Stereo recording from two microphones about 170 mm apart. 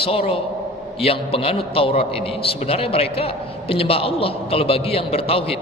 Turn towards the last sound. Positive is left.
turn(degrees=35)  # may be behind; listen again after turning